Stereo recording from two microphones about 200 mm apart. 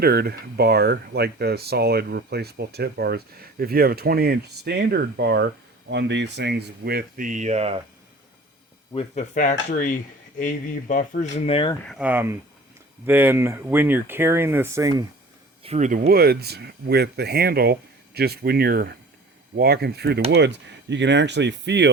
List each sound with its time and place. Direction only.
0.0 s speech: 50° right (ahead or behind); by 7.8 s 30° right (ahead or behind)
9.1 s speech: 40° left (ahead or behind)
11.9 s speech: 5° right (ahead or behind)
15.6 s speech: 35° right (ahead or behind); by 21.8 s 60° right (ahead or behind)